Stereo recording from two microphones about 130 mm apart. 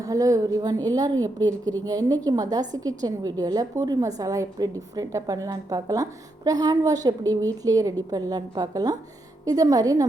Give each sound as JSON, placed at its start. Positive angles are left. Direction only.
{"t": 0.0, "sound": "a woman's voice", "side_deg": -25}